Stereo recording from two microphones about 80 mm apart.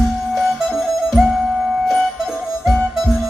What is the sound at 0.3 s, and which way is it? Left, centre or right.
Music, centre.